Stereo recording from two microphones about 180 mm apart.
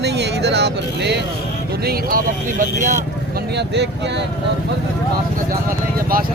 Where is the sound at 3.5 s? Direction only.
70° right (ahead or behind).